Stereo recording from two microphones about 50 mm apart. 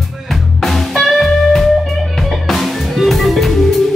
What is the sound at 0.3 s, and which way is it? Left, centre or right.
Music, centre.